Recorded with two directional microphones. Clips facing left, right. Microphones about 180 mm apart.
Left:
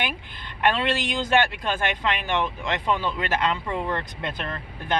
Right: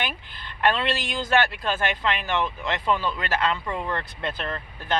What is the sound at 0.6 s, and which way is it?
Speech, 15° left (ahead or behind).